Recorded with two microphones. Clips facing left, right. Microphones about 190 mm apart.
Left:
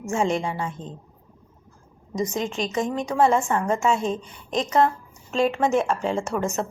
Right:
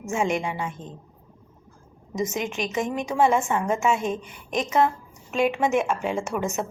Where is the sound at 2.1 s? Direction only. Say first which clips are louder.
Left 1 dB; 20° right (ahead or behind).